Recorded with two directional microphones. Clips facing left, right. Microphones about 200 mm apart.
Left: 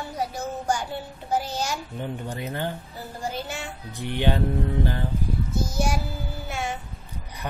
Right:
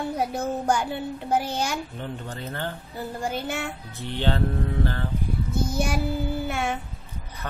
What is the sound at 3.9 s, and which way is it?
Speech, 15° left (ahead or behind).